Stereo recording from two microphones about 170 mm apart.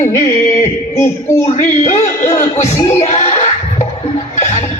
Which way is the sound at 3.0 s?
45° left (ahead or behind).